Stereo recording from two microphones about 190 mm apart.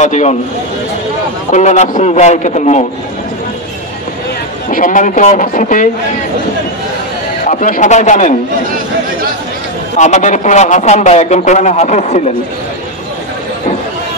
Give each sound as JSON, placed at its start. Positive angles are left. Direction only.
{"t": 0.0, "sound": "speech", "side_deg": 40}
{"t": 1.5, "sound": "speech", "side_deg": 40}
{"t": 4.6, "sound": "speech", "side_deg": 45}
{"t": 7.4, "sound": "speech", "side_deg": 40}
{"t": 9.9, "sound": "speech", "side_deg": 40}